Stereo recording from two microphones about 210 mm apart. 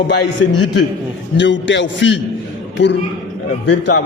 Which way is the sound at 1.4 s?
60° left (ahead or behind).